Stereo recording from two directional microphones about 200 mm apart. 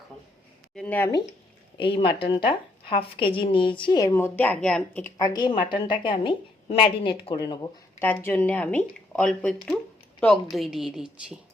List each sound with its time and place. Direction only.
0.8 s speech: 10° left (ahead or behind)
1.8 s speech: 25° left (ahead or behind); by 5.1 s 5° left (ahead or behind)
5.1 s speech: 20° left (ahead or behind)
7.9 s a woman's voice: 10° left (ahead or behind)